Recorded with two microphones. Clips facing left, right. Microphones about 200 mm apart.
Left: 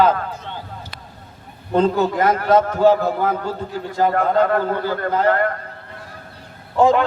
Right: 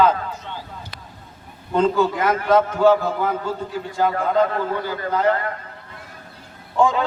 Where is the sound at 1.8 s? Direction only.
40° left (ahead or behind).